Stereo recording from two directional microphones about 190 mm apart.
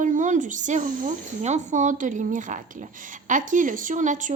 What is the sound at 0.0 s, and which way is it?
Speech, 40° right (ahead or behind).